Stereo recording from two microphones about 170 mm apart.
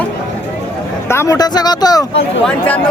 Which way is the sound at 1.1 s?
15° left (ahead or behind).